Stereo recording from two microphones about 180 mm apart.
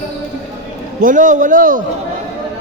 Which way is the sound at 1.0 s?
45° right (ahead or behind).